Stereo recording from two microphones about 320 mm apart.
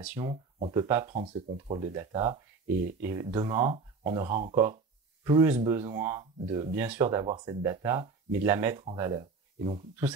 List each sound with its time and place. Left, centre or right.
0.2 s speech: centre